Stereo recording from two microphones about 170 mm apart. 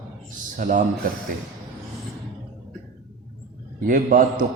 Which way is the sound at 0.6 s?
55° right (ahead or behind).